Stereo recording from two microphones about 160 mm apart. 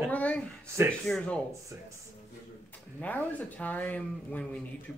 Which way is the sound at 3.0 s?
10° left (ahead or behind).